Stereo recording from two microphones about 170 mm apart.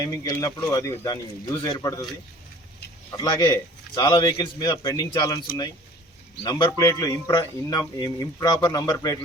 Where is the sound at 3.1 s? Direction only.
25° left (ahead or behind).